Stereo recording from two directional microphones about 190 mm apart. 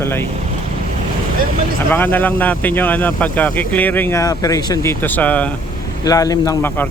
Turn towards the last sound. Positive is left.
turn(degrees=15)  # may be behind; listen again after turning